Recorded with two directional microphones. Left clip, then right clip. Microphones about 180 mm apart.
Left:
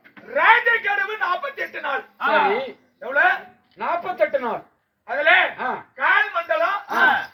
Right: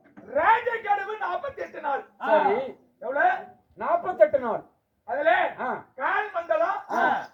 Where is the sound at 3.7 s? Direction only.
10° left (ahead or behind).